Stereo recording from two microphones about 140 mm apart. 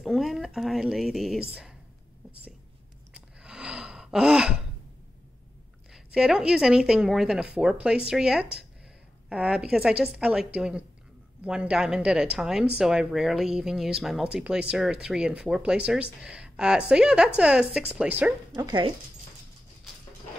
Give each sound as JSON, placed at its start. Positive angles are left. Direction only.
{"t": 0.0, "sound": "speech", "side_deg": 0}
{"t": 3.1, "sound": "gasp", "side_deg": -5}
{"t": 5.9, "sound": "a woman's voice", "side_deg": -5}
{"t": 18.6, "sound": "speech", "side_deg": -35}